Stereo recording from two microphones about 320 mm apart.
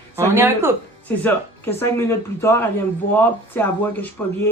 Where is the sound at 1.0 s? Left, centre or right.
Centre.